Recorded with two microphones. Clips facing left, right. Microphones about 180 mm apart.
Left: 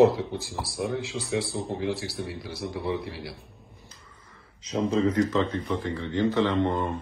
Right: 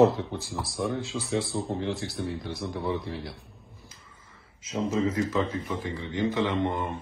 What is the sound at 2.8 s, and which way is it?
Speech, 70° left (ahead or behind).